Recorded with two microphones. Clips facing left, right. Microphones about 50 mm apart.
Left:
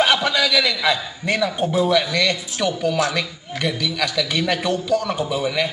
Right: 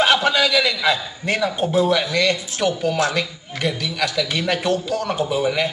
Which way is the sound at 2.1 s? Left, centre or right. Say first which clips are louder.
Right 1 dB; centre.